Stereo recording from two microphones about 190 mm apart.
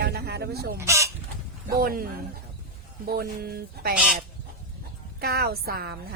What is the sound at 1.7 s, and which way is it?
A woman's voice, 50° right (ahead or behind).